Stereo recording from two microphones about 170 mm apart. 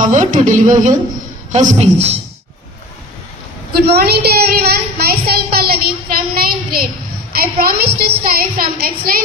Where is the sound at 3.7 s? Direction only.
65° right (ahead or behind).